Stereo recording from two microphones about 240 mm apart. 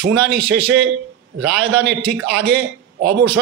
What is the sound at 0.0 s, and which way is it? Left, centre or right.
A man's voice, right.